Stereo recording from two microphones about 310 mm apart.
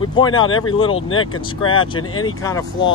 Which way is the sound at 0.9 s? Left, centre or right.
Left.